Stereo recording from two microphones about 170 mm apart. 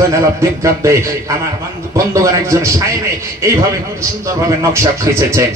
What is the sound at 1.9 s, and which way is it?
A man's voice, 20° right (ahead or behind).